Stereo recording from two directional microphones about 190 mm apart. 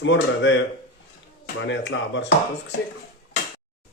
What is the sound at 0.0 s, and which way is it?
A man's voice, 75° left (ahead or behind).